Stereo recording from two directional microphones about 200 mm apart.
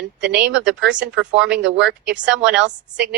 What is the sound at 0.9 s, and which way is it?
Speech, 65° right (ahead or behind).